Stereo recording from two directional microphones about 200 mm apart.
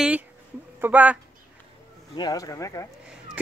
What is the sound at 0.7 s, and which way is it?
Speech, 10° right (ahead or behind).